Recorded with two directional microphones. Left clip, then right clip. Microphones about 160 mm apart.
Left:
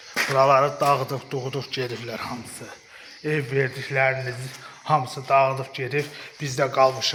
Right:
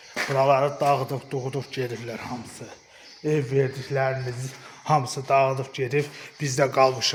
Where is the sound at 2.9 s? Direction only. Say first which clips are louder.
Right 1 dB; 40° right (ahead or behind).